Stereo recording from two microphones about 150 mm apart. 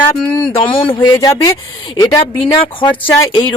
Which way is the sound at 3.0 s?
30° left (ahead or behind).